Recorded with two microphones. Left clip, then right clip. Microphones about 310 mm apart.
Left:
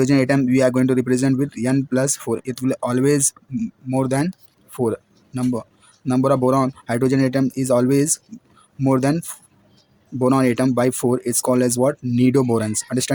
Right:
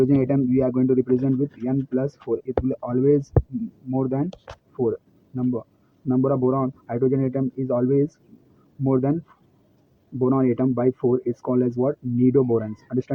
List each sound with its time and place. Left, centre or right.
0.0 s speech: left
10.2 s speech: left